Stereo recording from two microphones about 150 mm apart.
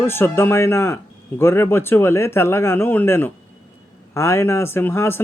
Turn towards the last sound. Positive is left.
turn(degrees=15)  # may be behind; listen again after turning